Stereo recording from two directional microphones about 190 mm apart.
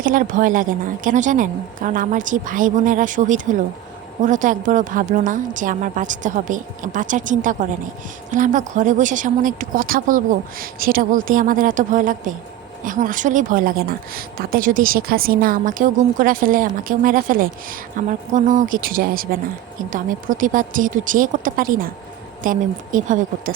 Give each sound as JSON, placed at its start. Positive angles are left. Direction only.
{"t": 0.0, "sound": "a woman's voice", "side_deg": -45}